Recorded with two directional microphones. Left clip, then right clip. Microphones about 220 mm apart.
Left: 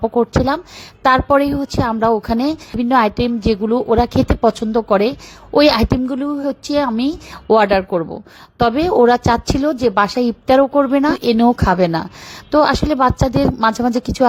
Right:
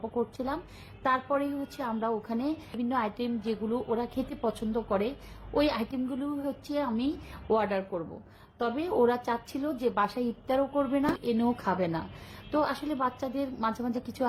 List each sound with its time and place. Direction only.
0.1 s a woman's voice: 40° left (ahead or behind)